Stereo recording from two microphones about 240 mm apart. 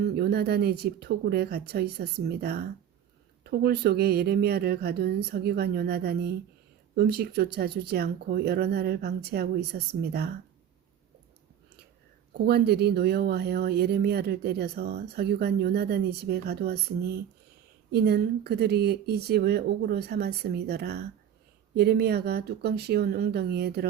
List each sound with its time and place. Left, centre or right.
0.0 s speech: right
12.5 s speech: right